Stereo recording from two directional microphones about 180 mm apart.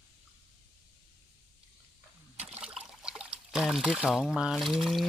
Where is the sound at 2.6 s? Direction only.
5° right (ahead or behind).